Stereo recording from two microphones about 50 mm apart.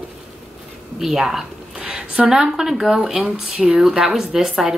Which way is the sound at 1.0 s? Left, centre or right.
Centre.